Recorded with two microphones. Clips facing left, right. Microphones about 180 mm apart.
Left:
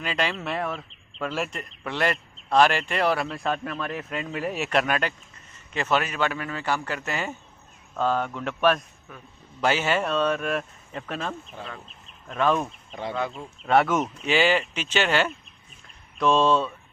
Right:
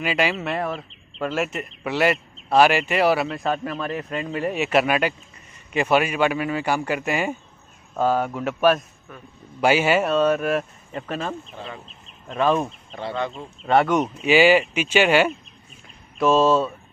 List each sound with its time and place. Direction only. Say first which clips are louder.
0.0 s a man's voice: right 5 dB; 10° right (ahead or behind)
11.5 s a man's voice: right 2 dB; 15° right (ahead or behind)
12.4 s speech: right 3 dB; 5° right (ahead or behind)
12.9 s speech: right 1 dB; 10° left (ahead or behind)
14.2 s a man's voice: right 8 dB; 10° right (ahead or behind)